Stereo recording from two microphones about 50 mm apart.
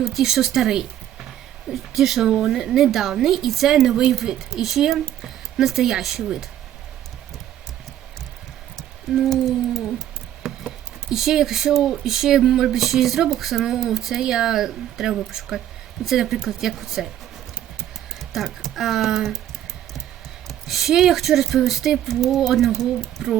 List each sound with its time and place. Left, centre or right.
0.0 s a woman's voice: centre
2.2 s speech: centre
6.2 s speech: centre
9.1 s speech: centre
10.4 s a sound: centre
11.1 s speech: centre
18.3 s speech: centre
20.5 s speech: centre